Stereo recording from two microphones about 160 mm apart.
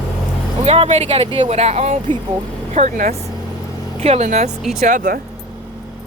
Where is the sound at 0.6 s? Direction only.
40° right (ahead or behind).